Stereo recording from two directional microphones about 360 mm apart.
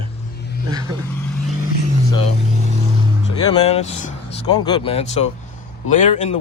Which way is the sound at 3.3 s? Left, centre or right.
Centre.